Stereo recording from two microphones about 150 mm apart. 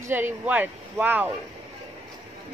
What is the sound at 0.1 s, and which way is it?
A woman's voice, 10° right (ahead or behind).